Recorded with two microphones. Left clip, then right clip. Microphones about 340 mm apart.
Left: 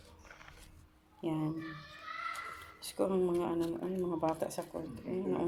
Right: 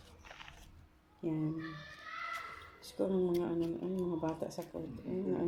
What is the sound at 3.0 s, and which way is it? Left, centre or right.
Speech, left.